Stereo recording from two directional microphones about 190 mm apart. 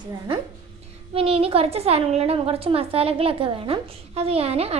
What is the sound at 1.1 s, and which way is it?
A woman's voice, 30° right (ahead or behind).